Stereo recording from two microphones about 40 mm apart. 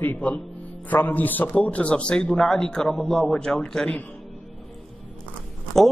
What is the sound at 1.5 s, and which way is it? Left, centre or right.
Speech, left.